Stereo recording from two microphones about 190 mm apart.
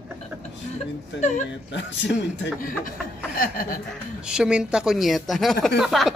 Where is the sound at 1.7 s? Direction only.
70° left (ahead or behind).